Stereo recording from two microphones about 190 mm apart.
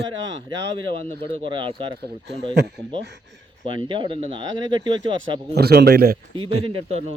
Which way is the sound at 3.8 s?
25° right (ahead or behind).